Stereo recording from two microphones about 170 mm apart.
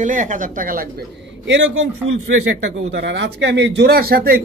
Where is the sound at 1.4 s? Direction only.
90° right.